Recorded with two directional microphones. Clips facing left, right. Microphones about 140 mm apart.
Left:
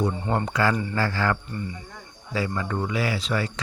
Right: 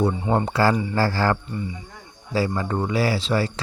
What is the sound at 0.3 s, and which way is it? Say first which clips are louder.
Speech: right 4 dB; 30° right (ahead or behind).